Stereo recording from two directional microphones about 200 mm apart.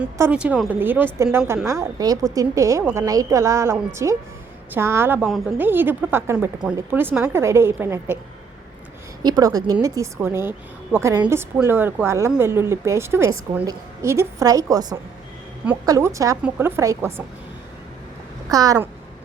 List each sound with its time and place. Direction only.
0.0 s a woman's voice: 5° right (ahead or behind)
9.2 s a woman's voice: 20° right (ahead or behind)
18.5 s a woman's voice: 15° right (ahead or behind)